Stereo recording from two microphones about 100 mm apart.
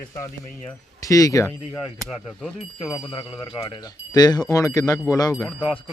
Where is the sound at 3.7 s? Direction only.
40° left (ahead or behind).